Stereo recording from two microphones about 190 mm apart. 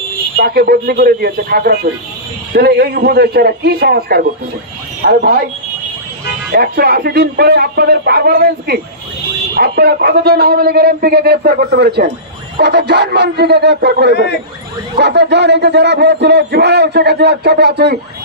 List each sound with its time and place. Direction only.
0.4 s a man's voice: 50° right (ahead or behind)
6.5 s a man's voice: 55° right (ahead or behind)